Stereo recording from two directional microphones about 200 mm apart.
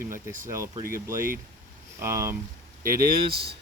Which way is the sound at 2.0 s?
15° right (ahead or behind).